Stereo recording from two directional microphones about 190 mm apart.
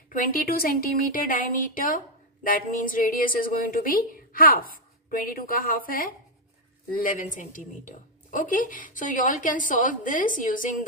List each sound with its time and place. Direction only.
0.2 s a woman's voice: 50° left (ahead or behind)